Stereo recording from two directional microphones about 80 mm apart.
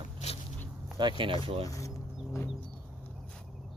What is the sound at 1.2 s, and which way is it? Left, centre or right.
Speech, right.